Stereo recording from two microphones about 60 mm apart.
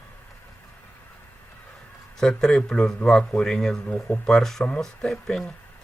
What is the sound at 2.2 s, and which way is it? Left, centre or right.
Speech, centre.